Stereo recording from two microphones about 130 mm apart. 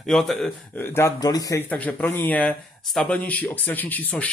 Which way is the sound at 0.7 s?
15° left (ahead or behind).